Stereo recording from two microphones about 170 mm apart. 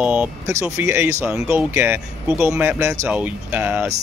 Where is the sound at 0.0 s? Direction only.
5° right (ahead or behind).